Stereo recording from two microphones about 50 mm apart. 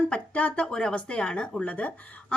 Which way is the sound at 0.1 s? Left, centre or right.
Left.